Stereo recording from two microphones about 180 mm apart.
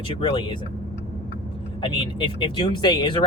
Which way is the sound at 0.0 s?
25° left (ahead or behind).